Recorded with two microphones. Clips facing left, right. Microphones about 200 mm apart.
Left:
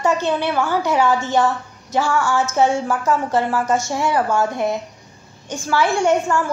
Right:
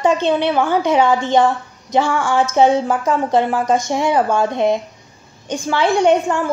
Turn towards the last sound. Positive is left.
turn(degrees=-20)  # may be behind; listen again after turning